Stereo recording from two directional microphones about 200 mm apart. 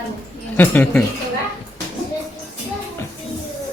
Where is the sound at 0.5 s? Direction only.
10° left (ahead or behind).